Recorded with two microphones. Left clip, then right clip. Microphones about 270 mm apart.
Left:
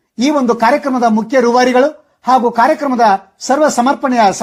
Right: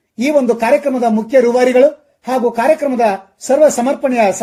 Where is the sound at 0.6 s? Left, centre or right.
Left.